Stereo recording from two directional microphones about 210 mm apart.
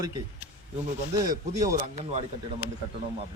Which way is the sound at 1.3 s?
35° right (ahead or behind).